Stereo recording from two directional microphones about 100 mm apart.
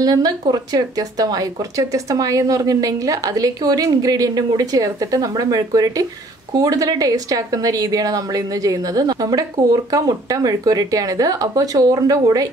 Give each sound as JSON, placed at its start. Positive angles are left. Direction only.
{"t": 0.0, "sound": "speech", "side_deg": -40}